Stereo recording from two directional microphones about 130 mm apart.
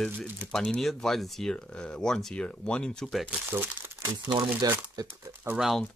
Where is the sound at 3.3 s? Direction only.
15° right (ahead or behind).